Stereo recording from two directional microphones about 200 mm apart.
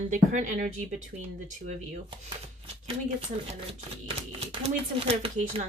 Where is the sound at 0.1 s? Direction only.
40° right (ahead or behind).